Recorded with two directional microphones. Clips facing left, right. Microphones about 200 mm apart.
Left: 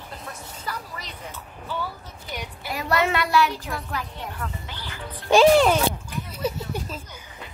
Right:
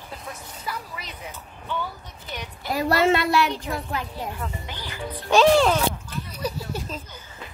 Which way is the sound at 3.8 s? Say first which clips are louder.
Right 2 dB; 30° right (ahead or behind).